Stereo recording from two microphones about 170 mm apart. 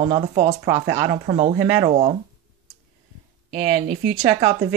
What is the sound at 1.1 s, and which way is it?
Speech, 40° right (ahead or behind).